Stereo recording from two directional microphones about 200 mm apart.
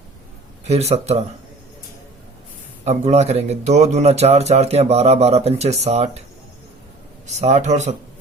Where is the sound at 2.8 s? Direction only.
35° right (ahead or behind).